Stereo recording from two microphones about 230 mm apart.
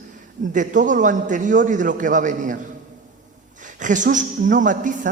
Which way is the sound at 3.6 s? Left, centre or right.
Right.